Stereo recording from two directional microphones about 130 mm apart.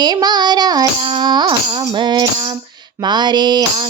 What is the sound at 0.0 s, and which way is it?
Music, 30° right (ahead or behind).